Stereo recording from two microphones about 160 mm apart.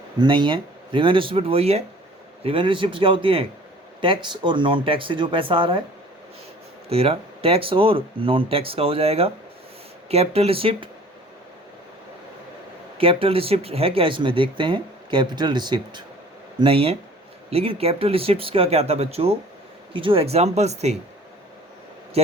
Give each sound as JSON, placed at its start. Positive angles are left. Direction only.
{"t": 0.2, "sound": "speech", "side_deg": -30}
{"t": 6.9, "sound": "speech", "side_deg": -40}
{"t": 13.0, "sound": "speech", "side_deg": -35}